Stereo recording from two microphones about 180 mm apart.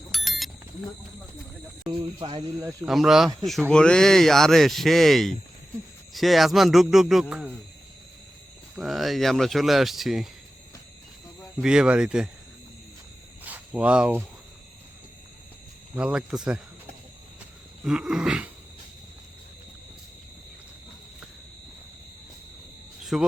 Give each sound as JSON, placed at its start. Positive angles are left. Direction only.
{"t": 0.1, "sound": "bicycle bell", "side_deg": 0}
{"t": 1.9, "sound": "speech", "side_deg": -25}
{"t": 2.8, "sound": "speech", "side_deg": 0}
{"t": 8.7, "sound": "speech", "side_deg": 0}
{"t": 11.3, "sound": "speech", "side_deg": -5}
{"t": 13.4, "sound": "speech", "side_deg": -10}
{"t": 16.0, "sound": "speech", "side_deg": -5}
{"t": 17.8, "sound": "speech", "side_deg": -5}
{"t": 23.1, "sound": "speech", "side_deg": -5}